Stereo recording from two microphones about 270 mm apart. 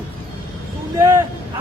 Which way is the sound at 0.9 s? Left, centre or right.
Centre.